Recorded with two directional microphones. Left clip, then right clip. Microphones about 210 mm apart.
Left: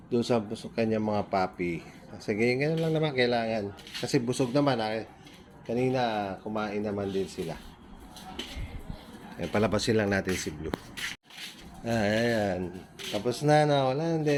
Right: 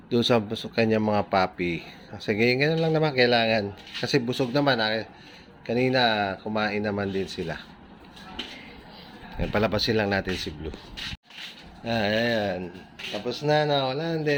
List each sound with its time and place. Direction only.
0.1 s speech: 20° right (ahead or behind)
4.0 s speech: 5° right (ahead or behind)
5.6 s speech: 20° right (ahead or behind)
9.4 s speech: 5° right (ahead or behind)
11.9 s speech: 5° left (ahead or behind)
13.2 s speech: 20° left (ahead or behind)